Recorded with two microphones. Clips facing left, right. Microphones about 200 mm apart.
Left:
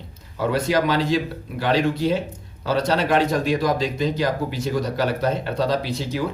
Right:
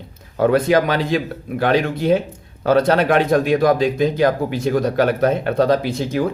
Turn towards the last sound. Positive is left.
turn(degrees=-50)  # may be behind; listen again after turning